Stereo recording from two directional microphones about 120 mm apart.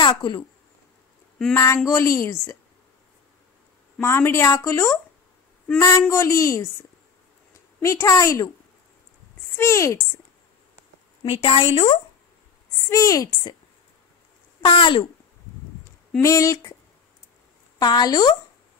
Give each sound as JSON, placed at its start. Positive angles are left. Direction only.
{"t": 0.0, "sound": "speech", "side_deg": 40}
{"t": 1.9, "sound": "a woman's voice", "side_deg": 25}
{"t": 4.0, "sound": "a woman's voice", "side_deg": 20}
{"t": 9.6, "sound": "a woman's voice", "side_deg": 25}
{"t": 11.2, "sound": "a woman's voice", "side_deg": 50}
{"t": 12.7, "sound": "a woman's voice", "side_deg": 25}
{"t": 14.6, "sound": "a woman's voice", "side_deg": 45}
{"t": 16.2, "sound": "a woman's voice", "side_deg": 25}
{"t": 17.7, "sound": "speech", "side_deg": 35}